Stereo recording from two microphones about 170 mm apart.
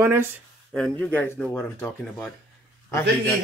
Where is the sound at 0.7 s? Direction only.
5° left (ahead or behind).